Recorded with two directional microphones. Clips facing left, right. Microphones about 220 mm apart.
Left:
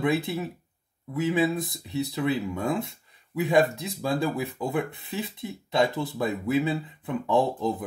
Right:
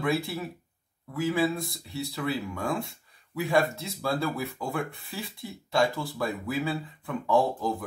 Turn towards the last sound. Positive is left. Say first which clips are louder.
# left 1 dB
turn(degrees=20)  # may be behind; listen again after turning